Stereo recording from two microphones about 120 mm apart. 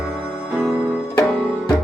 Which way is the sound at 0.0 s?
5° right (ahead or behind).